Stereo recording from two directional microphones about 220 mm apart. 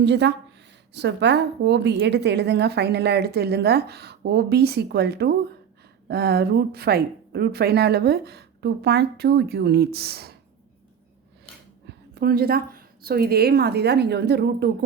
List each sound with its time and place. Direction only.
0.0 s a woman's voice: 50° right (ahead or behind)
12.1 s a woman's voice: 45° right (ahead or behind)